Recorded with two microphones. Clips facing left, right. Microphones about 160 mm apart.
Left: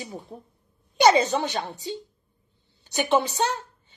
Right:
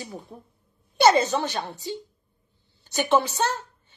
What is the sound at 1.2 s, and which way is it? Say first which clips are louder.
A woman's voice: even; 15° left (ahead or behind).